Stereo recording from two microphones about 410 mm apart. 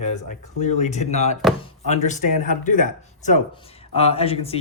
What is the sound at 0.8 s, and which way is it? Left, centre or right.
Speech, centre.